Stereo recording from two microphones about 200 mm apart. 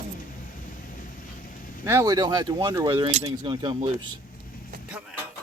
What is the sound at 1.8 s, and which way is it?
Speech, 15° right (ahead or behind).